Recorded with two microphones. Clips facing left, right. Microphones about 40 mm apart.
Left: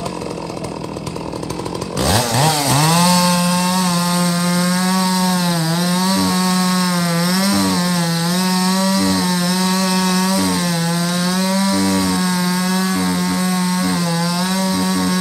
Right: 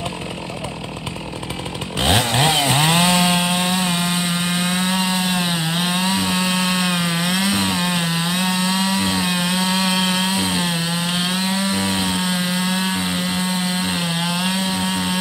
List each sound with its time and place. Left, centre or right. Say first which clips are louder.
2.0 s chainsaw: left 1 dB; right